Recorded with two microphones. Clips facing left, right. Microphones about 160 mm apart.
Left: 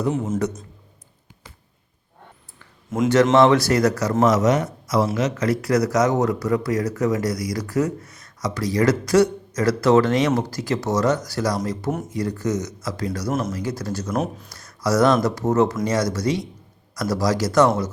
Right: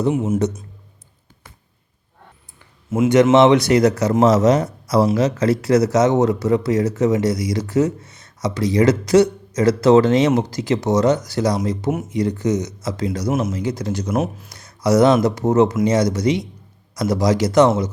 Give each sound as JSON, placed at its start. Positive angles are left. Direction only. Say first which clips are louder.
{"t": 0.1, "sound": "a man's voice", "louder": "right 4 dB", "side_deg": -10}
{"t": 2.6, "sound": "a sound", "louder": "right 4 dB", "side_deg": -5}
{"t": 3.3, "sound": "a man's voice", "louder": "right 3 dB", "side_deg": -20}
{"t": 14.1, "sound": "speech", "louder": "right 3 dB", "side_deg": -5}
{"t": 14.8, "sound": "speech", "louder": "right 4 dB", "side_deg": -20}